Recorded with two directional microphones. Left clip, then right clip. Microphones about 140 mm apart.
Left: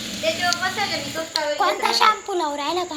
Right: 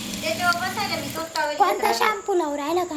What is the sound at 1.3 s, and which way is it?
Speech, 40° right (ahead or behind).